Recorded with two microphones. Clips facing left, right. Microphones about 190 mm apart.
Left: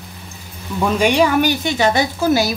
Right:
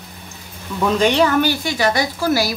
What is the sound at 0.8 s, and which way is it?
Speech, 10° left (ahead or behind).